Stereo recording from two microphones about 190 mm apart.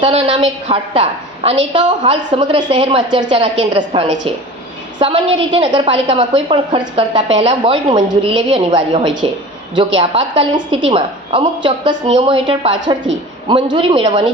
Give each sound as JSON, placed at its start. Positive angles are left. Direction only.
{"t": 0.0, "sound": "a woman's voice", "side_deg": -30}